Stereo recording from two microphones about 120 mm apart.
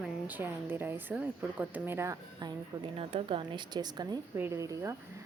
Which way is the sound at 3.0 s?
50° right (ahead or behind).